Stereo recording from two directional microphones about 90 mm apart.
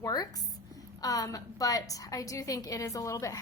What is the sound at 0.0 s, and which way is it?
A woman's voice, 45° left (ahead or behind).